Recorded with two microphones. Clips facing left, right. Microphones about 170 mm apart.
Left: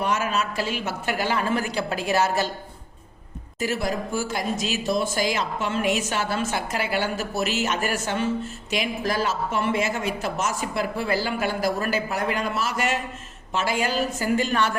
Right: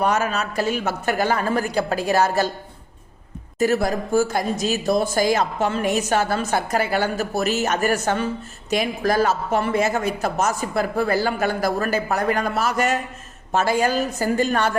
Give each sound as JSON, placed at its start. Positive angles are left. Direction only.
{"t": 0.0, "sound": "a man's voice", "side_deg": -40}
{"t": 3.6, "sound": "a man's voice", "side_deg": -45}